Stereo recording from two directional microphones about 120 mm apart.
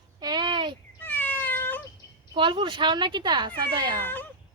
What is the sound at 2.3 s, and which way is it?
Speech, 45° right (ahead or behind).